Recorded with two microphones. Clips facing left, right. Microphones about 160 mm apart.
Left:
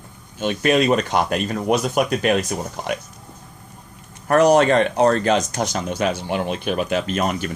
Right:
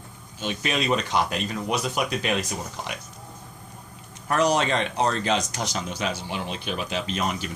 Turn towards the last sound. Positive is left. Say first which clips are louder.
# left 6 dB
turn(degrees=55)  # may be behind; listen again after turning